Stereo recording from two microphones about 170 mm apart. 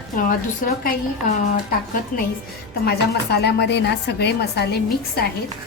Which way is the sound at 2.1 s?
50° left (ahead or behind).